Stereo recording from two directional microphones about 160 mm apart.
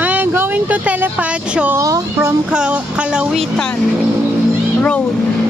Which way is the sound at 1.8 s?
20° right (ahead or behind).